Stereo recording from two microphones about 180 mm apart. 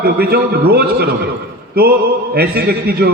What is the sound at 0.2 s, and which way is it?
Speech, 60° right (ahead or behind).